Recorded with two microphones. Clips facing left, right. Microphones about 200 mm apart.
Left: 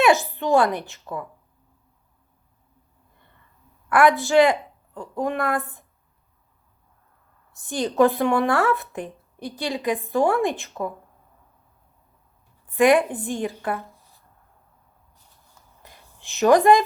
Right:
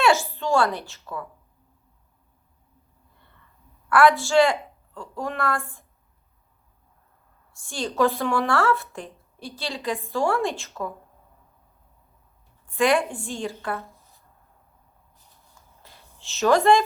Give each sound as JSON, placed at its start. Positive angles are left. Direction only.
{"t": 0.0, "sound": "a woman's voice", "side_deg": 15}
{"t": 3.8, "sound": "a woman's voice", "side_deg": 20}
{"t": 7.5, "sound": "a woman's voice", "side_deg": 20}
{"t": 12.6, "sound": "a woman's voice", "side_deg": 20}
{"t": 15.8, "sound": "a sound", "side_deg": 15}